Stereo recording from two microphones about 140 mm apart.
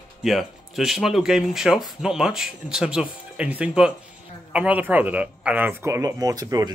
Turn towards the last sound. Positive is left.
turn(degrees=-25)  # may be behind; listen again after turning